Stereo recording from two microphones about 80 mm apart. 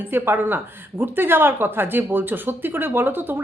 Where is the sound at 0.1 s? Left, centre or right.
Right.